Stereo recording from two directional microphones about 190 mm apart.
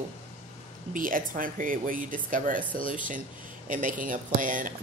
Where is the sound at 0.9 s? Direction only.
45° right (ahead or behind).